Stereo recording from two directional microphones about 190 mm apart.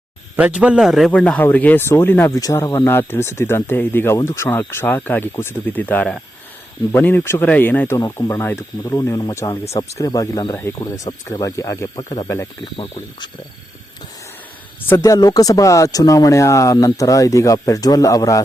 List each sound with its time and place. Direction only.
0.3 s a man's voice: 5° right (ahead or behind); by 13.3 s 25° left (ahead or behind)
14.8 s a man's voice: 15° left (ahead or behind)